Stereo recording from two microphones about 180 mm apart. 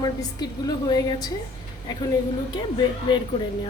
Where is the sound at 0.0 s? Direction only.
20° left (ahead or behind).